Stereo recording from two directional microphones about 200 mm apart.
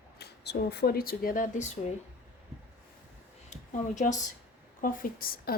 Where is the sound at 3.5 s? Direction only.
35° left (ahead or behind).